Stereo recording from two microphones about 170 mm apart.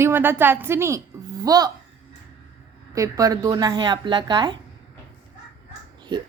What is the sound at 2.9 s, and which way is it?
A woman's voice, 20° right (ahead or behind).